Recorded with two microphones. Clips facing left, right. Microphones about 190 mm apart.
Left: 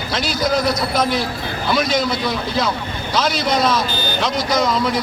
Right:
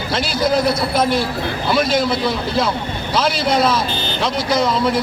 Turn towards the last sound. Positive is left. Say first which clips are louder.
# right 1 dB
turn(degrees=-30)  # may be behind; listen again after turning